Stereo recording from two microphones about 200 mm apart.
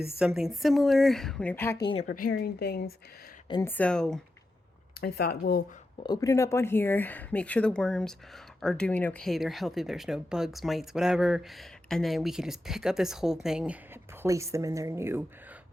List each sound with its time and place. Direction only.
0.2 s speech: 5° right (ahead or behind); by 1.9 s 15° left (ahead or behind)
2.0 s speech: 45° left (ahead or behind)
3.5 s speech: 10° left (ahead or behind)
4.9 s speech: 50° left (ahead or behind)
6.0 s speech: 20° left (ahead or behind); by 15.2 s 10° right (ahead or behind)